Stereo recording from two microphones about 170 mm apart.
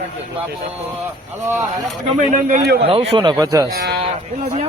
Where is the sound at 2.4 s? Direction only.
60° right (ahead or behind).